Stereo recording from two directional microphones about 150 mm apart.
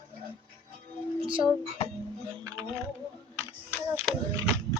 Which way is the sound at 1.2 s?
35° right (ahead or behind).